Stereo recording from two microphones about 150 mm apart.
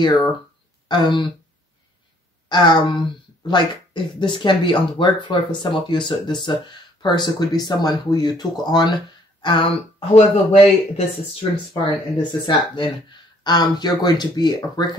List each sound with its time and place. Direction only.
0.8 s speech: 30° left (ahead or behind)
2.5 s speech: 30° left (ahead or behind)
11.8 s speech: 30° left (ahead or behind)